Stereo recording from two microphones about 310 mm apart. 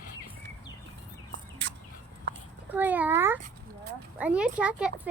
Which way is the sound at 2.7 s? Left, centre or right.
Centre.